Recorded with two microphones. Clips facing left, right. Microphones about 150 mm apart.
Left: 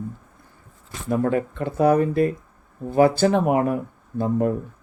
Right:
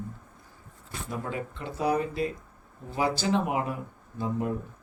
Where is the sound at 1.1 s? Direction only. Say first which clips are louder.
Left 13 dB; 55° left (ahead or behind).